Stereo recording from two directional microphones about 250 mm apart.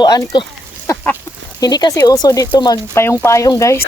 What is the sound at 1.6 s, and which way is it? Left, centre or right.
Speech, centre.